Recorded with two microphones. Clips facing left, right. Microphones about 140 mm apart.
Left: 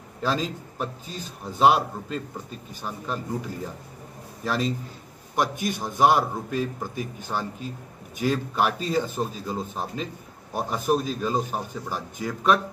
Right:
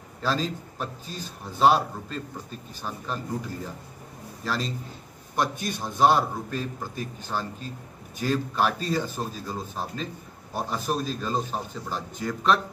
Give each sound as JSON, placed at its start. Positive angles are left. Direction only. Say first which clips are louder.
{"t": 0.2, "sound": "a man's voice", "louder": "left 1 dB", "side_deg": 15}
{"t": 4.5, "sound": "a man's voice", "louder": "left 4 dB", "side_deg": 15}